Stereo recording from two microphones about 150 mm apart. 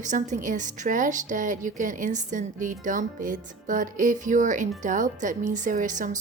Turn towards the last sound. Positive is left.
turn(degrees=-60)  # may be behind; listen again after turning